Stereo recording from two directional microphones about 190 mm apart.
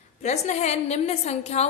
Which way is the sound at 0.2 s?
35° left (ahead or behind).